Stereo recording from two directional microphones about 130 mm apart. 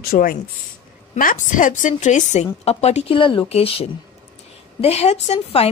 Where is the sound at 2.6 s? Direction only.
55° left (ahead or behind).